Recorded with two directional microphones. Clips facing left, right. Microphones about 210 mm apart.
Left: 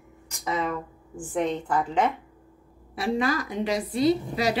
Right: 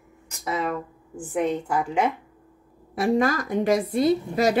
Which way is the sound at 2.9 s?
45° right (ahead or behind).